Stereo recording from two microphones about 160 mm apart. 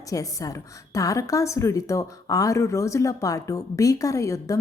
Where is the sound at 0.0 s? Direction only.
20° left (ahead or behind).